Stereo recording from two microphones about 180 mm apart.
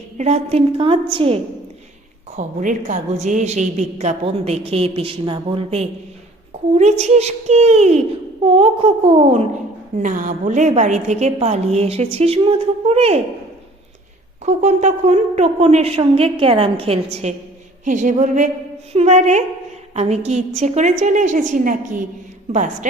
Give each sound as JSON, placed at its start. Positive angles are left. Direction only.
{"t": 0.2, "sound": "a woman's voice", "side_deg": -35}
{"t": 2.3, "sound": "a woman's voice", "side_deg": -45}
{"t": 14.4, "sound": "a woman's voice", "side_deg": -40}